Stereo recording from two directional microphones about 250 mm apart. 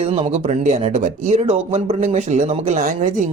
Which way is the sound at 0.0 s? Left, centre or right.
Right.